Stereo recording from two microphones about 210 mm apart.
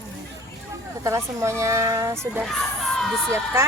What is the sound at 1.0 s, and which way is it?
Speech, 15° right (ahead or behind).